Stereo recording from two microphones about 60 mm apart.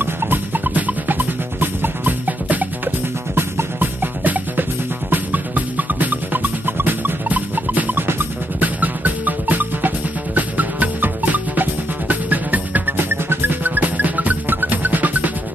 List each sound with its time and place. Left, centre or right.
0.0 s drum: right
3.3 s music: right
5.1 s drum: right
8.1 s music: right